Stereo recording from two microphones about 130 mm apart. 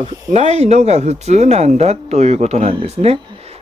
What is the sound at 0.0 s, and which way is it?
Speech, 55° right (ahead or behind).